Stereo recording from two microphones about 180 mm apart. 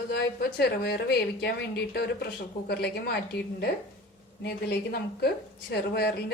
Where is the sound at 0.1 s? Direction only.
60° left (ahead or behind).